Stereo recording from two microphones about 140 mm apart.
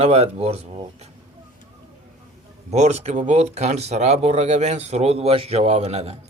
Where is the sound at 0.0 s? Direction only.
50° right (ahead or behind).